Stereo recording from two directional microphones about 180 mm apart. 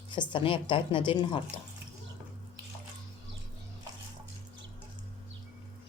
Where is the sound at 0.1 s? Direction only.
25° left (ahead or behind).